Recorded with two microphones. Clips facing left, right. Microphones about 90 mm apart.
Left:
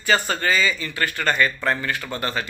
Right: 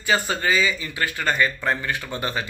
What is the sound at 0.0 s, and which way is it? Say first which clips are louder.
A man's voice: left 1 dB; 15° right (ahead or behind).